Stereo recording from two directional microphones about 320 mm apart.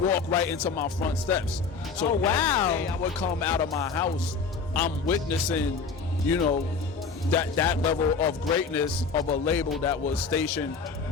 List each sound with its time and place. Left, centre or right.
0.0 s a man's voice: centre
7.3 s a man's voice: centre